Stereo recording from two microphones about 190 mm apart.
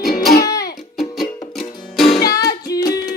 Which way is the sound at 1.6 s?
25° left (ahead or behind).